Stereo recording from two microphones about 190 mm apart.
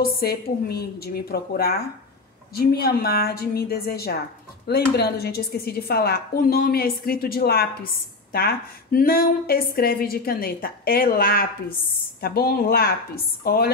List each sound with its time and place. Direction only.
0.0 s a woman's voice: 55° left (ahead or behind)